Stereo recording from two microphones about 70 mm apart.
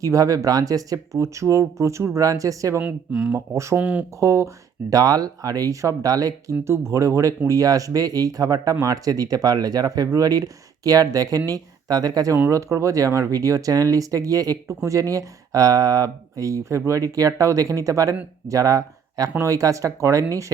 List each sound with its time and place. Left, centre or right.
0.0 s speech: right
2.8 s speech: centre
3.3 s speech: right
3.8 s speech: right
4.2 s speech: right
6.7 s speech: right
12.5 s speech: right